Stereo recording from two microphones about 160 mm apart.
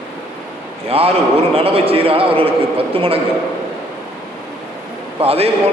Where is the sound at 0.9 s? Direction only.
35° right (ahead or behind).